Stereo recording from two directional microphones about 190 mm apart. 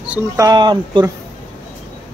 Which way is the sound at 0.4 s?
20° right (ahead or behind).